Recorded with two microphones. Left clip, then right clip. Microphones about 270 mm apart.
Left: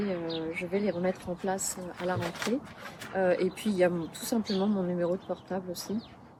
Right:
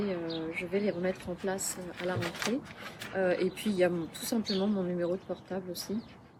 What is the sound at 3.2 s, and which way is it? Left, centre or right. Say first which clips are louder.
Speech: left 2 dB; left.